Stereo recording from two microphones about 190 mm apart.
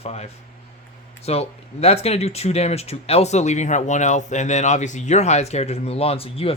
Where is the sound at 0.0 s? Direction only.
35° left (ahead or behind).